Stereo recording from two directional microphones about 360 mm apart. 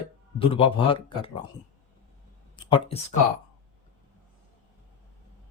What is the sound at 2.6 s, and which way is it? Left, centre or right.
Speech, centre.